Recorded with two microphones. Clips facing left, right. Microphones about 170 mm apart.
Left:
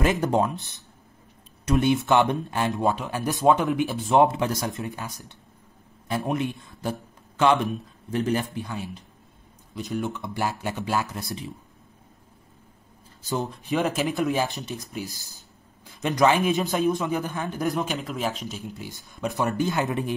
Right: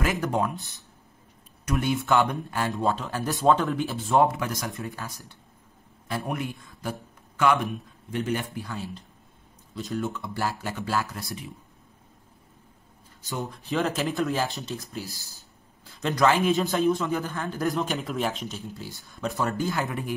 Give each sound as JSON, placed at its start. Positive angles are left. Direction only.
{"t": 0.0, "sound": "a man's voice", "side_deg": 25}
{"t": 8.1, "sound": "a man's voice", "side_deg": 40}
{"t": 8.5, "sound": "speech", "side_deg": 15}
{"t": 13.4, "sound": "speech", "side_deg": 20}
{"t": 17.8, "sound": "speech", "side_deg": 0}
{"t": 18.6, "sound": "speech", "side_deg": 20}